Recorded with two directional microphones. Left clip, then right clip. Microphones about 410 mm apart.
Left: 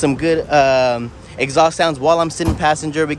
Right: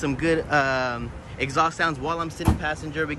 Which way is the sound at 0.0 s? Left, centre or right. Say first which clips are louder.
Left 7 dB; centre.